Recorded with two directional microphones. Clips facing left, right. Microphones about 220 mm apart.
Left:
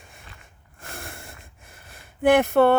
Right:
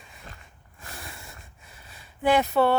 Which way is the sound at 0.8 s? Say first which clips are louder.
Left 4 dB; 50° left (ahead or behind).